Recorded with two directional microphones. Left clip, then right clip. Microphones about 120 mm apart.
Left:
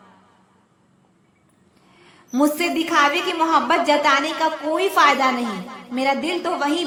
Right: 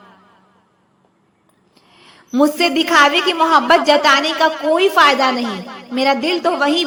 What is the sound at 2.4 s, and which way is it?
A woman's voice, 25° right (ahead or behind).